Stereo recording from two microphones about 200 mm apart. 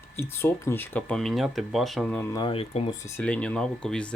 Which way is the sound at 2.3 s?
25° left (ahead or behind).